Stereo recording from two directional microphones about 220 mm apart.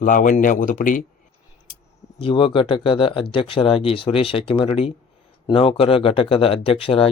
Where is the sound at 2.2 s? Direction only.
25° left (ahead or behind).